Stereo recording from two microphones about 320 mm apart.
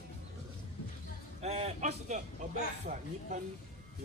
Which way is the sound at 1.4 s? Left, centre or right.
Centre.